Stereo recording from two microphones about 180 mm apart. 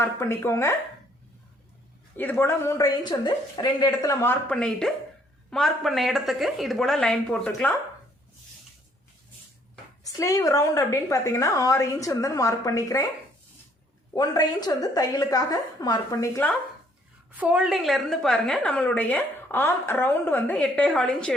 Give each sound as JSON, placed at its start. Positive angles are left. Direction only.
{"t": 0.0, "sound": "speech", "side_deg": 15}
{"t": 2.1, "sound": "a woman's voice", "side_deg": 10}
{"t": 10.0, "sound": "a woman's voice", "side_deg": 20}
{"t": 14.1, "sound": "a woman's voice", "side_deg": 20}
{"t": 17.3, "sound": "a woman's voice", "side_deg": -5}